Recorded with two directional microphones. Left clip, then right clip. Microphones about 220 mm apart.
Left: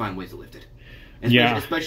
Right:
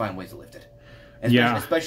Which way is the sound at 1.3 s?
15° right (ahead or behind).